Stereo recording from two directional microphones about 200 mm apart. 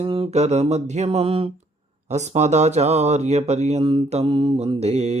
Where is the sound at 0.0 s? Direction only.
30° right (ahead or behind).